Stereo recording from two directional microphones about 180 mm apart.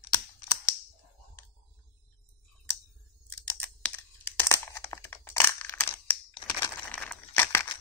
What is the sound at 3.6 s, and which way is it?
Crumpling, 10° left (ahead or behind).